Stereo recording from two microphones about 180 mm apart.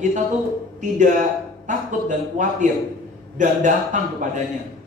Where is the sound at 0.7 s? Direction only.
45° right (ahead or behind).